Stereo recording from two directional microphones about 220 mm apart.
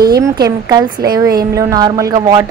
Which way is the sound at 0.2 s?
15° right (ahead or behind).